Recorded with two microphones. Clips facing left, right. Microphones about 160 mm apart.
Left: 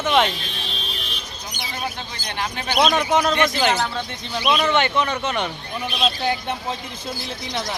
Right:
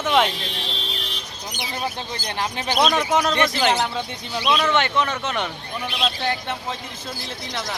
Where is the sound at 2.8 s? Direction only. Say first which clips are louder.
Left 1 dB; centre (ahead or behind).